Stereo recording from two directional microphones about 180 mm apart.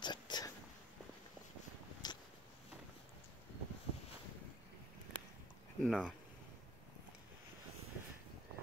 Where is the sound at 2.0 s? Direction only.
20° left (ahead or behind).